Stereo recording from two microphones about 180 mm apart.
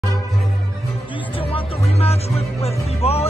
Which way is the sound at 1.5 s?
35° left (ahead or behind).